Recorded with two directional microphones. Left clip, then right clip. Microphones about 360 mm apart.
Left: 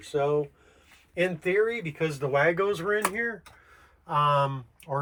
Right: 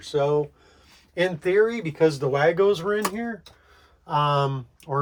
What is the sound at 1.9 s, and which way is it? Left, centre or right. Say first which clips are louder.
Speech: right 7 dB; centre.